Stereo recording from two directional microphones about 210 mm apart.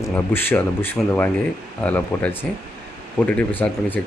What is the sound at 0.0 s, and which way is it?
Speech, 10° left (ahead or behind).